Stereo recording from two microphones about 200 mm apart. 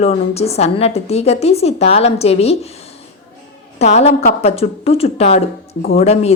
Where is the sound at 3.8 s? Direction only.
35° left (ahead or behind).